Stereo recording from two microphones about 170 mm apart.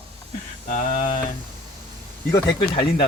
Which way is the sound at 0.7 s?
45° left (ahead or behind).